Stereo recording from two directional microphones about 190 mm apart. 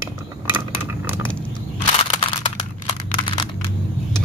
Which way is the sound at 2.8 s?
25° left (ahead or behind).